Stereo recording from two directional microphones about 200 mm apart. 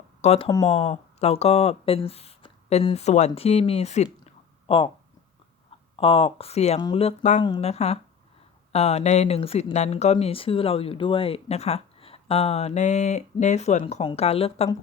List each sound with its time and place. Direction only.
0.2 s speech: 30° left (ahead or behind)
6.0 s speech: 25° left (ahead or behind)